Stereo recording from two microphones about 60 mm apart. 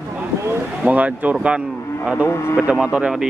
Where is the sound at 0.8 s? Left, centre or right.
Right.